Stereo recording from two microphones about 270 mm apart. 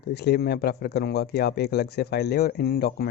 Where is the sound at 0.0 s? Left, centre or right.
Left.